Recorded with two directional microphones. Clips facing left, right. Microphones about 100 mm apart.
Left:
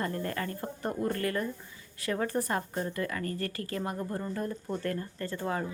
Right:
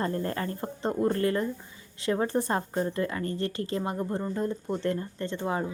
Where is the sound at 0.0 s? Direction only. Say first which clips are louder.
Right 3 dB; 30° right (ahead or behind).